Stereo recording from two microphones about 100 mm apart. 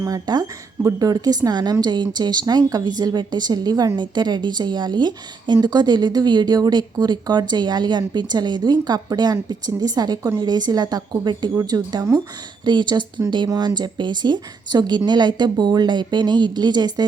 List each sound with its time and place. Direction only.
0.0 s speech: 40° right (ahead or behind)